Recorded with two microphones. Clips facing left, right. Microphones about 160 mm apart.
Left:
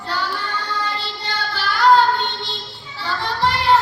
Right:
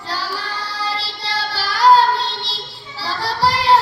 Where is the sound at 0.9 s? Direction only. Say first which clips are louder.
Right 2 dB; 35° right (ahead or behind).